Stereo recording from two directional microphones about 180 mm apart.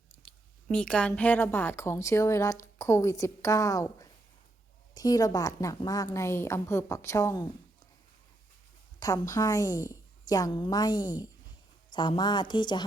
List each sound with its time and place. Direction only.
0.3 s a woman's voice: 5° left (ahead or behind)
9.0 s a woman's voice: 20° left (ahead or behind)